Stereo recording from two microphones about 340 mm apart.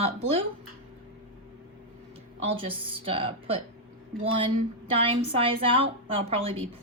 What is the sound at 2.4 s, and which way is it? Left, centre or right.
A woman's voice, centre.